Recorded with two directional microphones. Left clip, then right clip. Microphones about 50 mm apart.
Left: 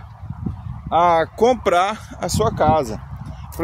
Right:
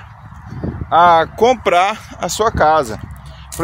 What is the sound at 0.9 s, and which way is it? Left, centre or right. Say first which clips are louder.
Speech: right 5 dB; centre.